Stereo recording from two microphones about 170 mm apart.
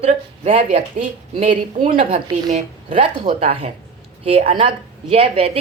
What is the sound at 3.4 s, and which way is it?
Speech, 35° right (ahead or behind).